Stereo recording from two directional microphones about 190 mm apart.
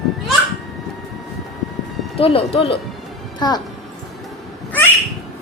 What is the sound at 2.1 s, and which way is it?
A woman's voice, 30° left (ahead or behind).